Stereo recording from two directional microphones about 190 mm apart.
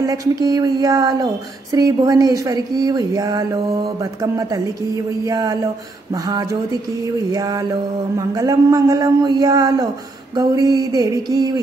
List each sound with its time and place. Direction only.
0.0 s speech: 20° right (ahead or behind)